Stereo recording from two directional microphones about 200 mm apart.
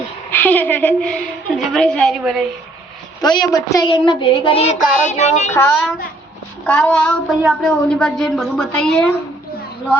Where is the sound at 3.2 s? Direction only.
20° left (ahead or behind).